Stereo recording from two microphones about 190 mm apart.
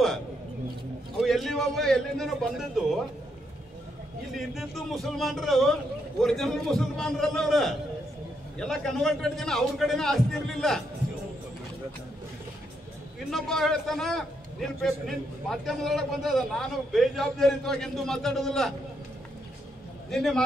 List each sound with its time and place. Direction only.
1.2 s a man's voice: centre (ahead or behind)
4.4 s a man's voice: centre (ahead or behind)
13.3 s a man's voice: centre (ahead or behind)
20.1 s a man's voice: centre (ahead or behind)